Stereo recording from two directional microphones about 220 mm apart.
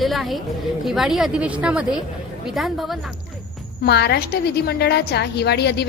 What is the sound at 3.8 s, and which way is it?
A woman's voice, 50° left (ahead or behind).